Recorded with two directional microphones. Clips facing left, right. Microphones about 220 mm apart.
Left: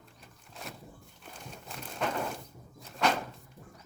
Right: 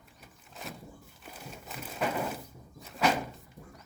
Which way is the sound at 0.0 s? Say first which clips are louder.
Even; 5° right (ahead or behind).